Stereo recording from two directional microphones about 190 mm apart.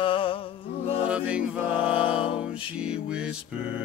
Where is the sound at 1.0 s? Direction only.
5° right (ahead or behind).